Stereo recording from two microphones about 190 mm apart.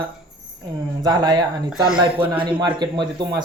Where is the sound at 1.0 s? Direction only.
20° right (ahead or behind).